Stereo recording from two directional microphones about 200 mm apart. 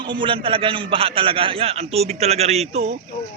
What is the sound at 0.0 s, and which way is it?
A man's voice, 25° right (ahead or behind).